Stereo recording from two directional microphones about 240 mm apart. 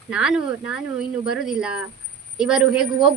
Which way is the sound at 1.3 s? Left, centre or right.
Centre.